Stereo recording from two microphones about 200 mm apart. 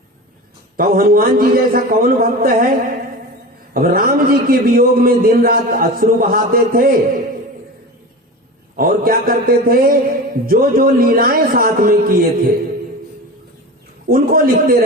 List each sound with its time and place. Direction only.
0.8 s a man's voice: 45° right (ahead or behind)
8.7 s a man's voice: 45° right (ahead or behind)
14.1 s a man's voice: 45° right (ahead or behind)